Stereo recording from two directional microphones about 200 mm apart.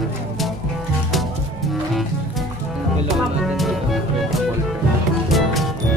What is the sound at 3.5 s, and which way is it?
Music, centre (ahead or behind).